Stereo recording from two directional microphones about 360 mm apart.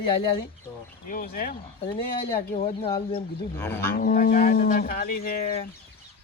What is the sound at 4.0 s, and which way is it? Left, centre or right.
Speech, left.